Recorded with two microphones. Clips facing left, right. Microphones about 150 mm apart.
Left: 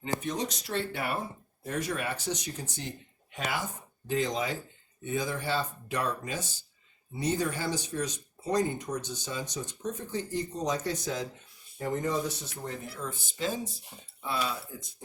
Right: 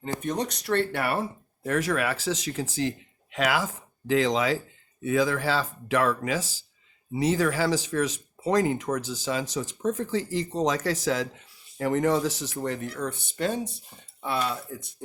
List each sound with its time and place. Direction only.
0.2 s speech: 55° right (ahead or behind)